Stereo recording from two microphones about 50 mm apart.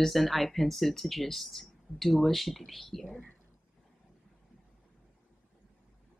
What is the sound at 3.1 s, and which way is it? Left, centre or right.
Speech, left.